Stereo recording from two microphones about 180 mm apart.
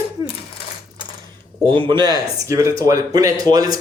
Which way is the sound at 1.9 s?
25° right (ahead or behind).